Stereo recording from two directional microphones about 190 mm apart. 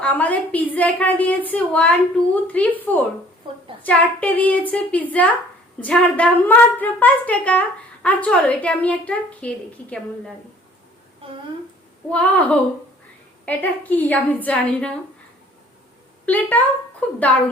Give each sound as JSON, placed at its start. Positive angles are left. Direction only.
{"t": 0.0, "sound": "a woman's voice", "side_deg": 10}
{"t": 11.2, "sound": "speech", "side_deg": -30}
{"t": 12.0, "sound": "a woman's voice", "side_deg": 5}
{"t": 16.2, "sound": "a woman's voice", "side_deg": 10}